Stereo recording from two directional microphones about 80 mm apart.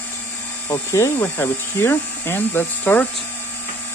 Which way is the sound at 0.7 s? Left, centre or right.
Left.